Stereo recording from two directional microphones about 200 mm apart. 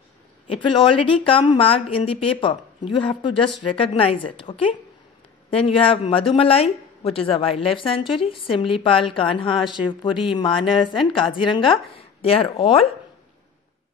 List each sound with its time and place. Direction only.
0.5 s a woman's voice: 25° left (ahead or behind)
10.6 s a woman's voice: centre (ahead or behind)
11.1 s a woman's voice: 25° left (ahead or behind)